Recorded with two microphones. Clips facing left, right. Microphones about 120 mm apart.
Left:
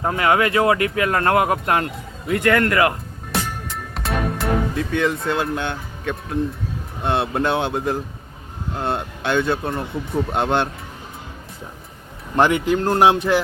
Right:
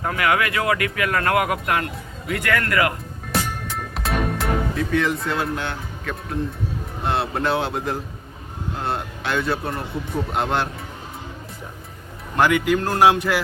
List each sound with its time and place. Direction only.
0.0 s speech: 30° left (ahead or behind)
3.7 s music: centre (ahead or behind)
4.7 s speech: 25° left (ahead or behind)
12.4 s speech: 25° left (ahead or behind)